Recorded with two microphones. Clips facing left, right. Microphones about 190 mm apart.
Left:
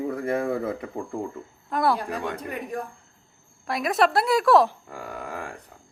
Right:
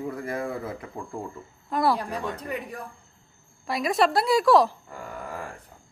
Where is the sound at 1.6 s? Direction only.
Centre (ahead or behind).